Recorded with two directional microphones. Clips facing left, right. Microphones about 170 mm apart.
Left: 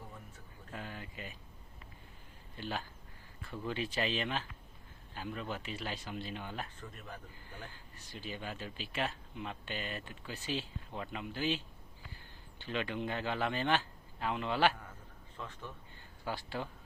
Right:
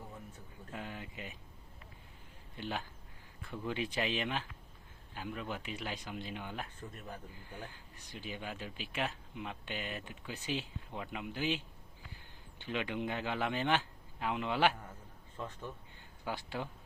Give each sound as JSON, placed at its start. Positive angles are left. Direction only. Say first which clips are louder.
{"t": 0.7, "sound": "a sound", "louder": "right 1 dB", "side_deg": -15}
{"t": 2.6, "sound": "speech", "louder": "even", "side_deg": -20}
{"t": 12.6, "sound": "speech", "louder": "even", "side_deg": -15}
{"t": 15.4, "sound": "speech", "louder": "right 3 dB", "side_deg": -30}
{"t": 16.2, "sound": "speech", "louder": "even", "side_deg": -15}